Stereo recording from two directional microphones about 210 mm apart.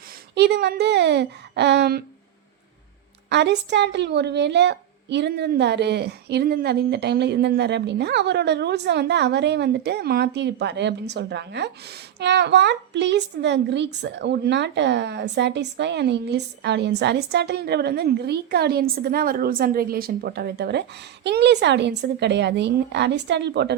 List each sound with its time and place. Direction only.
0.3 s a woman's voice: 50° right (ahead or behind)
3.2 s a woman's voice: 55° right (ahead or behind)